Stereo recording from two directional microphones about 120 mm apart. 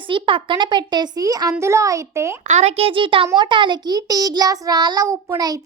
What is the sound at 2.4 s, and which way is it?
A child's voice, 70° right (ahead or behind).